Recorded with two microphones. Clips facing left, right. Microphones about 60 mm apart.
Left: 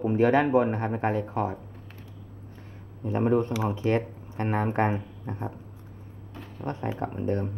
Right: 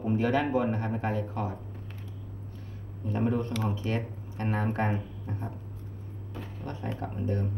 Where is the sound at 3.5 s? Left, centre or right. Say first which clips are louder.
Left 3 dB; centre.